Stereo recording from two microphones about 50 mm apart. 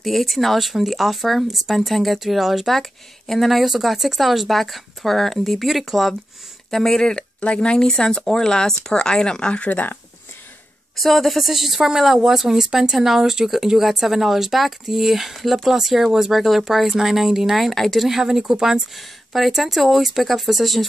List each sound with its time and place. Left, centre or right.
0.0 s speech: centre
6.7 s speech: centre
9.7 s speech: left
11.0 s speech: centre
18.0 s speech: centre